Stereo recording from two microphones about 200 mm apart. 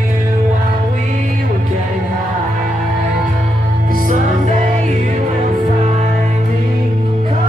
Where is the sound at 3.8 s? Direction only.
45° right (ahead or behind).